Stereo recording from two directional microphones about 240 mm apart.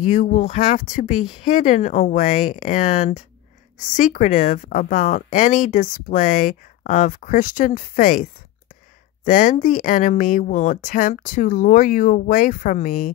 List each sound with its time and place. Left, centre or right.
0.0 s speech: left